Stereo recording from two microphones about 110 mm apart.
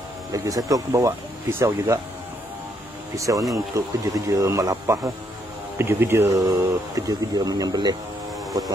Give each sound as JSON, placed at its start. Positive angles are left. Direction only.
{"t": 0.3, "sound": "speech", "side_deg": -30}
{"t": 3.2, "sound": "speech", "side_deg": -30}